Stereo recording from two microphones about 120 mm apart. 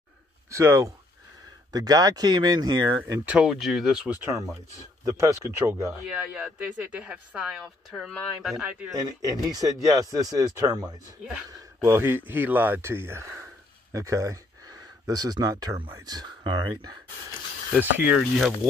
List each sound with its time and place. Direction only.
0.5 s speech: 25° right (ahead or behind)
3.3 s speech: 5° right (ahead or behind)
4.2 s speech: 20° right (ahead or behind)
6.0 s speech: 10° right (ahead or behind)
8.9 s speech: 30° right (ahead or behind)
17.7 s speech: 10° right (ahead or behind)